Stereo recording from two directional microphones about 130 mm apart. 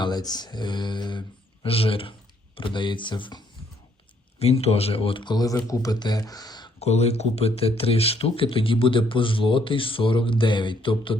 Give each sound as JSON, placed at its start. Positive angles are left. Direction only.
{"t": 0.0, "sound": "speech", "side_deg": 30}
{"t": 1.6, "sound": "speech", "side_deg": 45}
{"t": 4.4, "sound": "speech", "side_deg": 50}
{"t": 6.7, "sound": "speech", "side_deg": 55}